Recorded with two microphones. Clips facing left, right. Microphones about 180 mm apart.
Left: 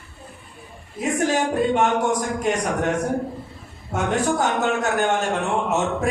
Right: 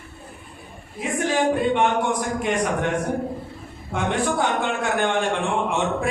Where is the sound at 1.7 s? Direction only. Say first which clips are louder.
Left 1 dB; 40° left (ahead or behind).